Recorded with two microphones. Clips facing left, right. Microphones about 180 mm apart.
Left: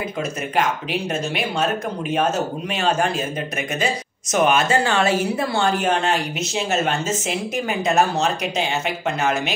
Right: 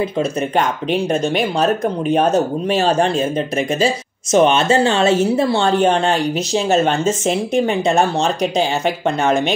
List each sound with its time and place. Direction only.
1.1 s speech: 35° right (ahead or behind)